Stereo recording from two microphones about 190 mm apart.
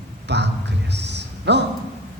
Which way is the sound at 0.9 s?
65° right (ahead or behind).